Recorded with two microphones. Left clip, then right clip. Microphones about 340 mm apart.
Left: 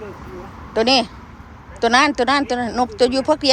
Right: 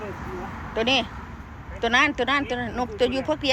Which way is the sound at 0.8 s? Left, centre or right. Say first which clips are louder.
Left 7 dB; centre.